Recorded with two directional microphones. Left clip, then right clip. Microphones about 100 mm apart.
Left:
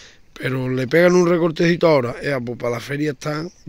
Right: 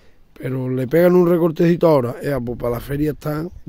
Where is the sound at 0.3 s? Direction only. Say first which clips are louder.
Left 2 dB; 15° right (ahead or behind).